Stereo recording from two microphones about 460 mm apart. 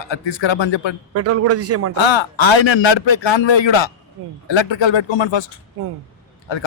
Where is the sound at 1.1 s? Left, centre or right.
Right.